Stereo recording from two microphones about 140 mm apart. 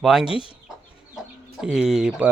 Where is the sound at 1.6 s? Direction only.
5° right (ahead or behind).